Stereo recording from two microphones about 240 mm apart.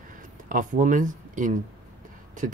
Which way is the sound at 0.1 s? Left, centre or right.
Right.